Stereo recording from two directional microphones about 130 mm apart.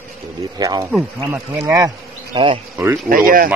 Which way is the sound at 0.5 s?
30° right (ahead or behind).